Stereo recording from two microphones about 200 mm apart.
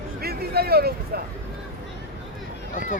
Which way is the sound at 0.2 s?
50° right (ahead or behind).